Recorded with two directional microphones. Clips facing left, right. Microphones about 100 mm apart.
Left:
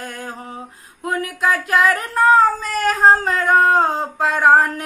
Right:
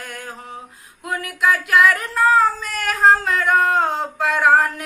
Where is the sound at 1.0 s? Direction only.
35° left (ahead or behind).